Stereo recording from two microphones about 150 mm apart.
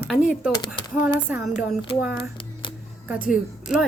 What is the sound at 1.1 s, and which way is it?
Speech, 10° right (ahead or behind).